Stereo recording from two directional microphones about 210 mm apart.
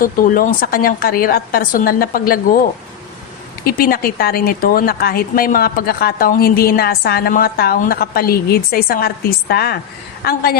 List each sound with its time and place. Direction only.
0.0 s speech: 40° left (ahead or behind)
3.6 s speech: 45° left (ahead or behind)